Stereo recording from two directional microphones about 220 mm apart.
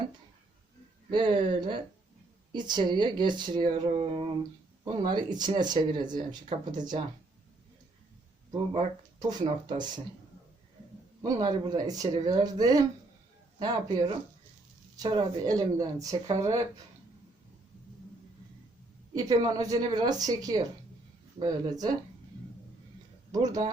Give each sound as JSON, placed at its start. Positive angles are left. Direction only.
{"t": 1.1, "sound": "speech", "side_deg": -20}
{"t": 9.1, "sound": "speech", "side_deg": -20}
{"t": 11.2, "sound": "speech", "side_deg": -20}
{"t": 19.1, "sound": "speech", "side_deg": -15}
{"t": 23.3, "sound": "speech", "side_deg": -15}